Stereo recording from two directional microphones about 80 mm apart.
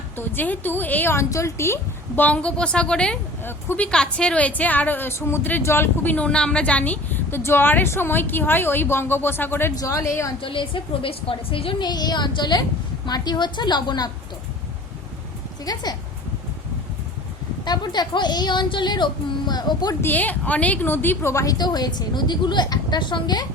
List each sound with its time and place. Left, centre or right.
0.2 s a woman's voice: left
1.1 s a woman's voice: left
2.2 s a woman's voice: centre
9.7 s a woman's voice: left
10.4 s a woman's voice: left
15.6 s a woman's voice: left
17.7 s a woman's voice: left
20.0 s a woman's voice: left
21.4 s a woman's voice: left